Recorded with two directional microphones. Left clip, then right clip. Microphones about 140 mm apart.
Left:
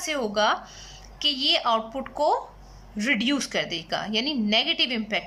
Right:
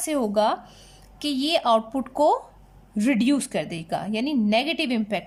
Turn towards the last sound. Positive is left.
turn(degrees=-30)  # may be behind; listen again after turning